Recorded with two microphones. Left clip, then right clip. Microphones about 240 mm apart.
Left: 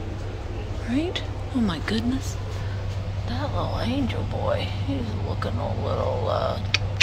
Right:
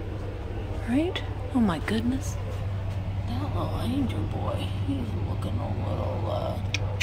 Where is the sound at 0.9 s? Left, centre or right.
Centre.